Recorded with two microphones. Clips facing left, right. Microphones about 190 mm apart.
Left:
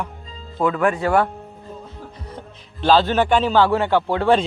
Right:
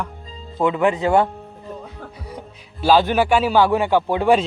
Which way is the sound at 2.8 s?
10° right (ahead or behind).